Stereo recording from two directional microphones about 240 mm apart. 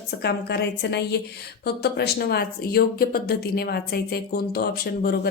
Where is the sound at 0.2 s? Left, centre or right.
Left.